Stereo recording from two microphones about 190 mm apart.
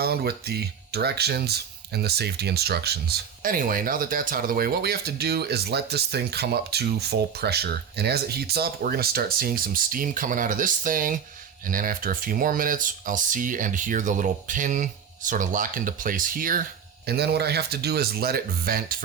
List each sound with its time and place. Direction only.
0.0 s speech: 55° right (ahead or behind)
17.1 s speech: 60° right (ahead or behind)